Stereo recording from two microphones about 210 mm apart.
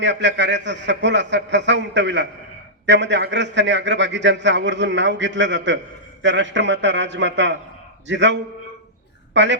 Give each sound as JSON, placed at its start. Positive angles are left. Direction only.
{"t": 0.0, "sound": "a man's voice", "side_deg": -55}